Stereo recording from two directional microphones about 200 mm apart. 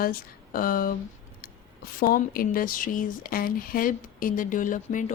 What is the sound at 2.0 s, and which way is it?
Speech, 45° left (ahead or behind).